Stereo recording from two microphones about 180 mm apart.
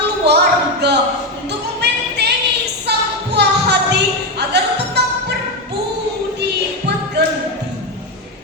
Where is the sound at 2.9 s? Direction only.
65° right (ahead or behind).